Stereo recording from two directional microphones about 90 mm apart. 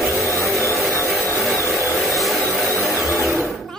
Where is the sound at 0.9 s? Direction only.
35° left (ahead or behind).